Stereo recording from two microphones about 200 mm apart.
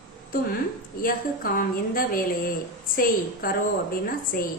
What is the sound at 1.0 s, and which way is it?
A woman's voice, 45° left (ahead or behind).